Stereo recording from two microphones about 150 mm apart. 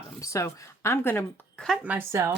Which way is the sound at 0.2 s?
20° left (ahead or behind).